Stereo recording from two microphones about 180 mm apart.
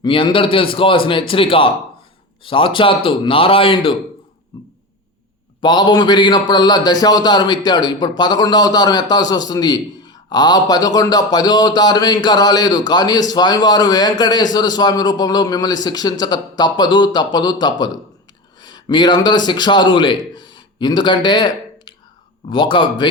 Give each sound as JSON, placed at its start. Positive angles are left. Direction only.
{"t": 0.0, "sound": "a man's voice", "side_deg": 25}
{"t": 4.5, "sound": "a sound", "side_deg": 20}
{"t": 5.6, "sound": "a man's voice", "side_deg": 25}